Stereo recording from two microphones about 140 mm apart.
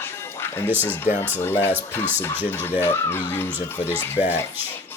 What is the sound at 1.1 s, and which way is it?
Speech, 60° left (ahead or behind).